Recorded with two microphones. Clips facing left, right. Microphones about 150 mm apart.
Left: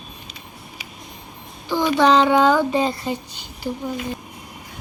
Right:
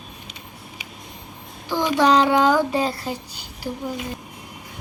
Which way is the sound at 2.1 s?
10° right (ahead or behind).